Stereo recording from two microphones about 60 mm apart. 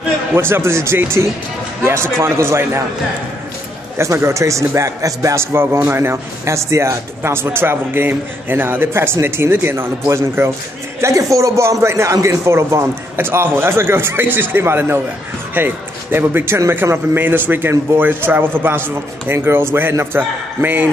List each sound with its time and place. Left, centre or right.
0.3 s a man's voice: right
4.0 s a man's voice: right
10.4 s a man's voice: right
20.2 s a man's voice: right